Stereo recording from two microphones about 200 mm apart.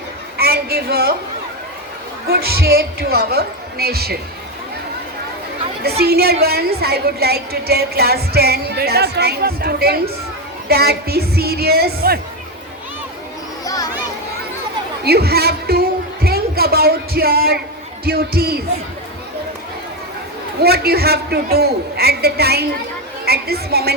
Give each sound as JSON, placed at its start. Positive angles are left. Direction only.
{"t": 0.3, "sound": "a sound", "side_deg": -50}
{"t": 2.2, "sound": "a woman's voice", "side_deg": -50}
{"t": 6.0, "sound": "a woman's voice", "side_deg": -50}
{"t": 13.7, "sound": "children playing", "side_deg": 15}
{"t": 15.0, "sound": "a woman's voice", "side_deg": -50}
{"t": 20.6, "sound": "a woman's voice", "side_deg": -50}